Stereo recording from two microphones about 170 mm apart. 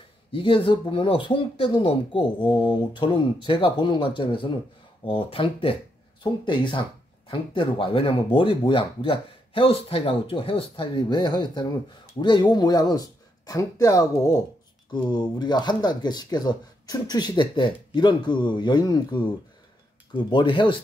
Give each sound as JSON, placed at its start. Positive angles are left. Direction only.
{"t": 0.3, "sound": "speech", "side_deg": 30}
{"t": 20.2, "sound": "speech", "side_deg": 30}